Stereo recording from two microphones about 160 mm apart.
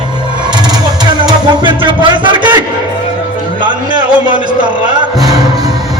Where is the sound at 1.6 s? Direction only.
30° right (ahead or behind).